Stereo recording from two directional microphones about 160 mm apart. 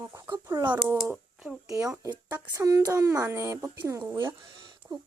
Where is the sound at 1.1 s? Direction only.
5° right (ahead or behind).